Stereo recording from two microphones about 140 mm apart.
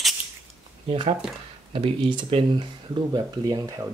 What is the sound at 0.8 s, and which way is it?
Speech, 40° right (ahead or behind).